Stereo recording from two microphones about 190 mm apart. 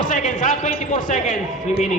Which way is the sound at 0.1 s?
45° left (ahead or behind).